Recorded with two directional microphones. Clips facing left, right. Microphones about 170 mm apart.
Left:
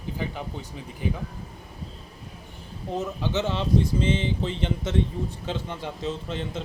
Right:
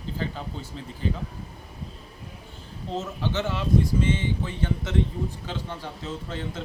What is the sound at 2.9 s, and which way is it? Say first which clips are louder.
Speech: left 1 dB; 15° left (ahead or behind).